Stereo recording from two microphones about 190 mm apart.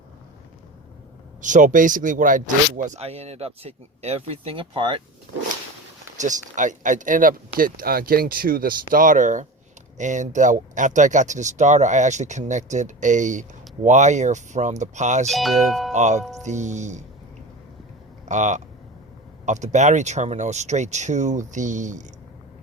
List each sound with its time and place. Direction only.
1.4 s speech: 40° right (ahead or behind)
6.1 s speech: 40° right (ahead or behind)
15.3 s speech: centre (ahead or behind)
15.9 s speech: 40° right (ahead or behind)
18.3 s speech: 40° right (ahead or behind)